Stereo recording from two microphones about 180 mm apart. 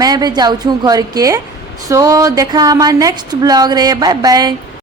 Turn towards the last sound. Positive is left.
turn(degrees=-20)  # may be behind; listen again after turning